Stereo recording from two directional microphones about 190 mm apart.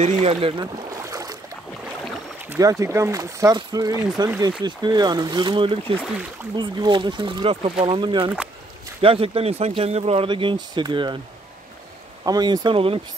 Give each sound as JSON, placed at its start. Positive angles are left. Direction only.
{"t": 0.0, "sound": "speech", "side_deg": -35}
{"t": 1.0, "sound": "boat", "side_deg": -15}
{"t": 2.5, "sound": "speech", "side_deg": -15}
{"t": 12.3, "sound": "speech", "side_deg": -20}